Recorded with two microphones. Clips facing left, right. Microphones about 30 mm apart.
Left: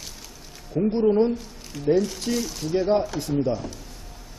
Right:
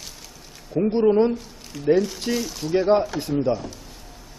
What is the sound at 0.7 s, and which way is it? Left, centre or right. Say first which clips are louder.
Speech: right 2 dB; right.